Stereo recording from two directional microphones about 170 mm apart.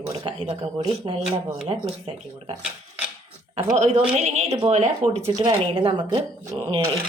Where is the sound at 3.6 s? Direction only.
40° right (ahead or behind).